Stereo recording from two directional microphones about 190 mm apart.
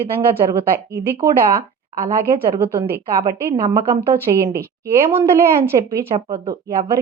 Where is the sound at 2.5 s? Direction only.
10° right (ahead or behind).